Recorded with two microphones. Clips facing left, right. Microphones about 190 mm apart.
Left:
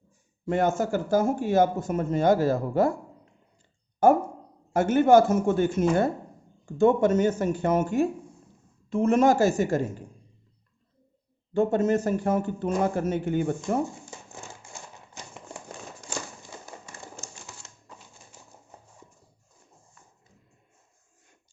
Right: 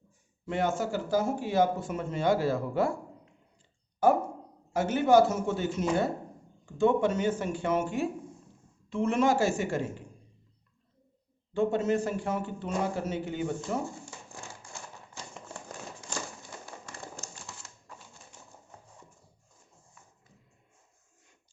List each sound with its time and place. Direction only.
0.4 s speech: 45° left (ahead or behind)
4.0 s a woman's voice: 50° left (ahead or behind)
11.5 s speech: 45° left (ahead or behind)